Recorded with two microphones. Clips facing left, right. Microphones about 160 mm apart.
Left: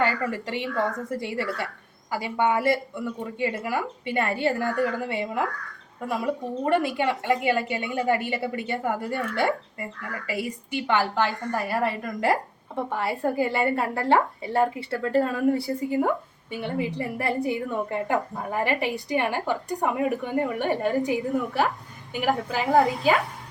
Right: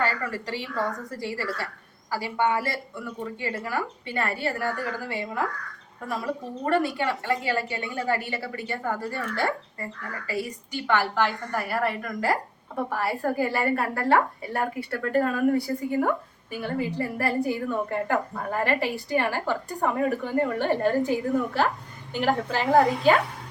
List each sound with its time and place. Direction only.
0.0 s a woman's voice: 20° left (ahead or behind)
20.7 s a woman's voice: centre (ahead or behind)
21.0 s a woman's voice: 20° left (ahead or behind)
22.2 s a woman's voice: centre (ahead or behind)